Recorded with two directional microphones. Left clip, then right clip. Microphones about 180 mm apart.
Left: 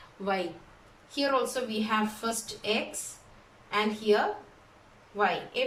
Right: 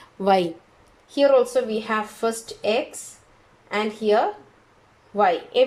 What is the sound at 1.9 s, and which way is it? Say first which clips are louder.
Speech: right 6 dB; 50° right (ahead or behind).